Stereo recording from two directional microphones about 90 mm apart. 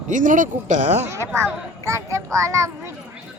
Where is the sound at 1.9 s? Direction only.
35° right (ahead or behind).